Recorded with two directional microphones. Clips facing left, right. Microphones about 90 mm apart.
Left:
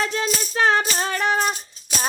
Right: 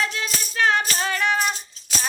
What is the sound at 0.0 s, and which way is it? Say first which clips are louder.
Music: left 3 dB; 35° left (ahead or behind).